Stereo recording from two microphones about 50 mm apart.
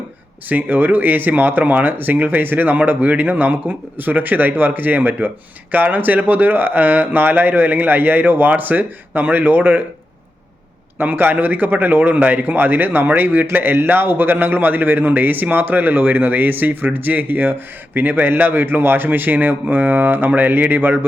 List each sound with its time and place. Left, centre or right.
0.4 s a man's voice: right
10.9 s a man's voice: right